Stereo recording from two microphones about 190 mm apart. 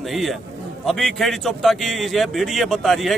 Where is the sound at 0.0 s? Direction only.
Centre (ahead or behind).